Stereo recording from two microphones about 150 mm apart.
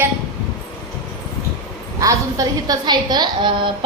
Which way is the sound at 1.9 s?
25° right (ahead or behind).